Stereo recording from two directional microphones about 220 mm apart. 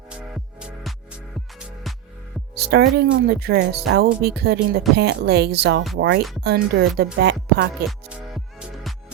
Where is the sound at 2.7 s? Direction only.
45° right (ahead or behind).